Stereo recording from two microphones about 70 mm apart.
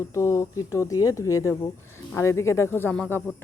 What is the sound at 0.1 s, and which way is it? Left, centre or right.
Speech, left.